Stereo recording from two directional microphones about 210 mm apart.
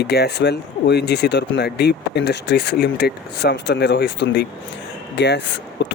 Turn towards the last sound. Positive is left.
turn(degrees=55)  # may be behind; listen again after turning